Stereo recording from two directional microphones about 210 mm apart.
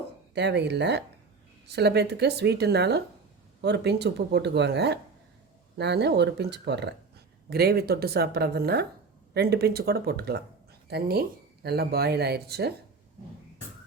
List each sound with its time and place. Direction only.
0.3 s speech: 55° right (ahead or behind)